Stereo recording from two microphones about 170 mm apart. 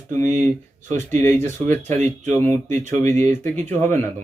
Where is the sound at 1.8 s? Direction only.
45° right (ahead or behind).